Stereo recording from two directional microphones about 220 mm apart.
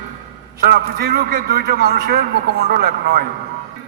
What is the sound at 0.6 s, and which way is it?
A man's voice, 45° right (ahead or behind).